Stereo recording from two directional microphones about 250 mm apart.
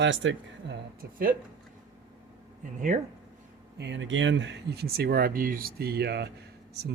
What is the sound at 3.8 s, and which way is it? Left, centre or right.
Speech, right.